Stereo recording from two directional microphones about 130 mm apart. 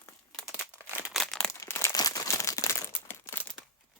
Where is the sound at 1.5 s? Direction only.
20° left (ahead or behind).